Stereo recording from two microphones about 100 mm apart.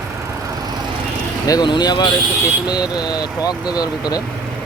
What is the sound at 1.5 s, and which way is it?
Speech, 45° left (ahead or behind).